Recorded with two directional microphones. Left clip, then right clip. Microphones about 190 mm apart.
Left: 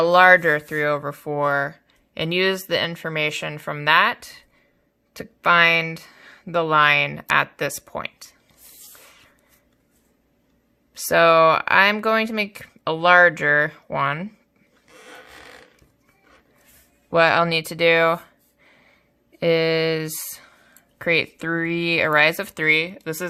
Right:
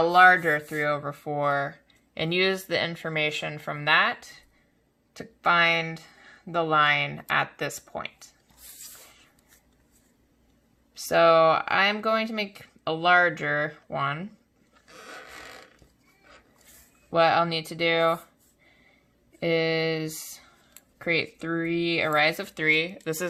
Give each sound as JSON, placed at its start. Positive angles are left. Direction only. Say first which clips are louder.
{"t": 0.0, "sound": "speech", "louder": "left 4 dB", "side_deg": 40}
{"t": 10.9, "sound": "speech", "louder": "left 4 dB", "side_deg": 40}
{"t": 17.1, "sound": "speech", "louder": "left 5 dB", "side_deg": 40}
{"t": 19.4, "sound": "speech", "louder": "left 6 dB", "side_deg": 35}